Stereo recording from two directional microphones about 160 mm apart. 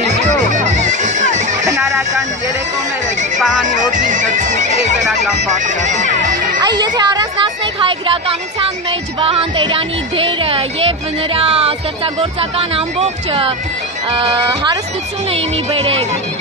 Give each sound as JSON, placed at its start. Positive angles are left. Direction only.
{"t": 0.0, "sound": "music", "side_deg": -45}
{"t": 1.7, "sound": "a sound", "side_deg": -20}
{"t": 3.3, "sound": "speech", "side_deg": 0}
{"t": 3.6, "sound": "speech", "side_deg": -50}
{"t": 6.6, "sound": "speech", "side_deg": -25}
{"t": 8.1, "sound": "speech", "side_deg": -40}
{"t": 14.4, "sound": "speech", "side_deg": -25}
{"t": 15.3, "sound": "speech", "side_deg": -35}